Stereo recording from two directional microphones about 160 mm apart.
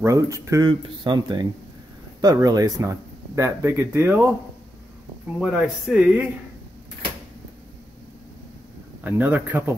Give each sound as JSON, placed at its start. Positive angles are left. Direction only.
{"t": 0.0, "sound": "speech", "side_deg": -20}
{"t": 5.4, "sound": "speech", "side_deg": -5}
{"t": 9.0, "sound": "speech", "side_deg": -10}